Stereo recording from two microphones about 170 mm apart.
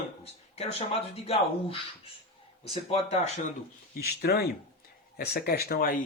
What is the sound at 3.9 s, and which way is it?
Speech, 65° left (ahead or behind).